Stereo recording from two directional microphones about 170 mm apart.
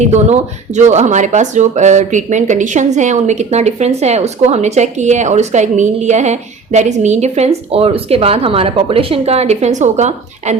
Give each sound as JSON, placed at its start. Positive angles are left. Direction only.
{"t": 0.0, "sound": "speech", "side_deg": -40}